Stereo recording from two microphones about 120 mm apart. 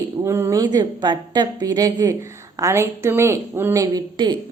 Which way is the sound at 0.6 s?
35° right (ahead or behind).